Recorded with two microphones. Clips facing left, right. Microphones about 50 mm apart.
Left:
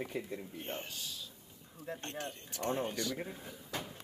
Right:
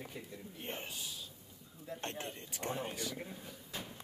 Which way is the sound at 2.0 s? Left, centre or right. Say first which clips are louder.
Right 4 dB; right.